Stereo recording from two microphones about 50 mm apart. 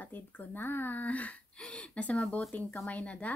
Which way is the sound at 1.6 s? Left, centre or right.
Left.